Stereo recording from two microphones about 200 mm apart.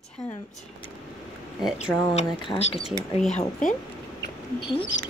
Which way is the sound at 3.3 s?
40° left (ahead or behind).